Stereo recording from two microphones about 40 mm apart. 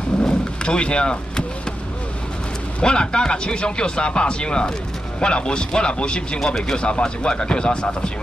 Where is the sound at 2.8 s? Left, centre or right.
Left.